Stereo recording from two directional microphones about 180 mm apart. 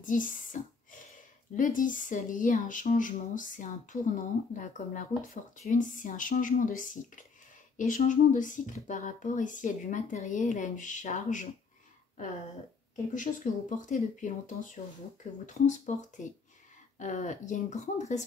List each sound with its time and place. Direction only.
0.0 s speech: 45° left (ahead or behind)
1.6 s speech: 45° left (ahead or behind)
13.1 s speech: 45° left (ahead or behind)